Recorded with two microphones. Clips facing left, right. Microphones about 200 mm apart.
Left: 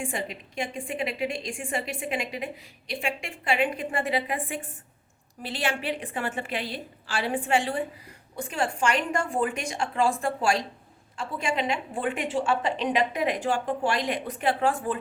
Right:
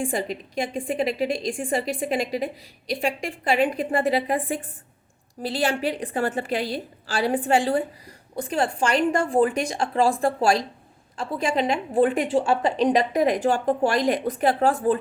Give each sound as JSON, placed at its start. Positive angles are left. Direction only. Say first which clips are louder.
{"t": 0.0, "sound": "a woman's voice", "louder": "right 6 dB", "side_deg": -35}